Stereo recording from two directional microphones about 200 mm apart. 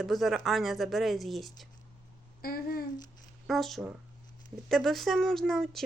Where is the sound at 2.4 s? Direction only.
50° left (ahead or behind).